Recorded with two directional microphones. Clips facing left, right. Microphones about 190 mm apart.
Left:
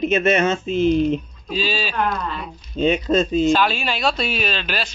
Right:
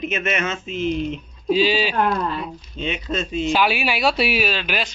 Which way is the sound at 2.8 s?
40° left (ahead or behind).